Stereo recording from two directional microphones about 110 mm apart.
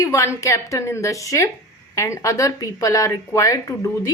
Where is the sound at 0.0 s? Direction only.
25° left (ahead or behind).